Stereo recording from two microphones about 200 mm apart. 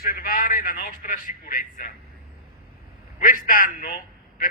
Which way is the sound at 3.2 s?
45° left (ahead or behind).